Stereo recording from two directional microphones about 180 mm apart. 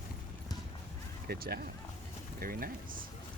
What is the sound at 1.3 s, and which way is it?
Speech, 60° right (ahead or behind).